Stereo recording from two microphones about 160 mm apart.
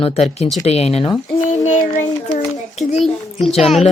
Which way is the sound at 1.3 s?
55° left (ahead or behind).